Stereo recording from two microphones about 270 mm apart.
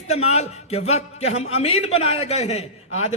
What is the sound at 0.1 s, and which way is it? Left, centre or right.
A man's voice, left.